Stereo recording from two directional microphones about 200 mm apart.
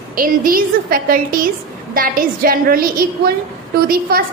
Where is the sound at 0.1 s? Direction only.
45° right (ahead or behind).